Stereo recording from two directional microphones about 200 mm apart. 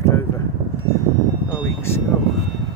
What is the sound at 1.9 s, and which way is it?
Speech, 10° left (ahead or behind).